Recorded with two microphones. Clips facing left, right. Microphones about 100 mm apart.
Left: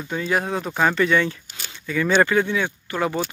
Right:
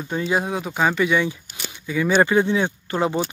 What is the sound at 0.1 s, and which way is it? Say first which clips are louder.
Speech: right 1 dB; 20° right (ahead or behind).